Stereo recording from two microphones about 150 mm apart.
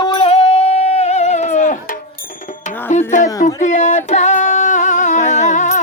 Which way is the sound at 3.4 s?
55° left (ahead or behind).